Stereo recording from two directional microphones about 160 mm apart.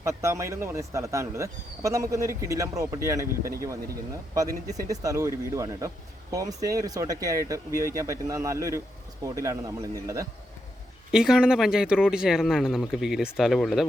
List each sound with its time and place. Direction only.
0.0 s speech: 20° right (ahead or behind)
11.1 s speech: 5° right (ahead or behind)